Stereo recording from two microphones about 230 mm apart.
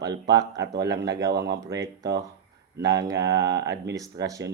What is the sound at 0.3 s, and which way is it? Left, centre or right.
Speech, right.